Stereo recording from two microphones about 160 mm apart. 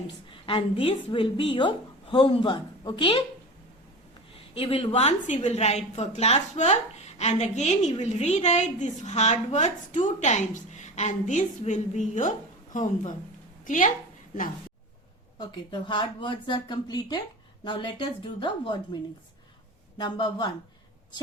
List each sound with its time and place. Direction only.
0.3 s a woman's voice: 35° left (ahead or behind)
4.4 s a woman's voice: 35° left (ahead or behind); by 13.9 s 55° left (ahead or behind)
15.4 s a woman's voice: 30° left (ahead or behind)
20.0 s a woman's voice: 30° left (ahead or behind)